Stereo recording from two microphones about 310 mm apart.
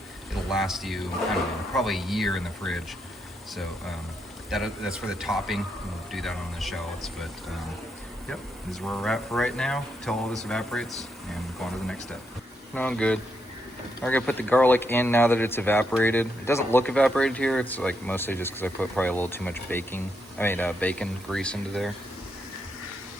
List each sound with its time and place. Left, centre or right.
0.5 s speech: centre
4.5 s speech: centre
8.3 s speech: centre
12.7 s speech: centre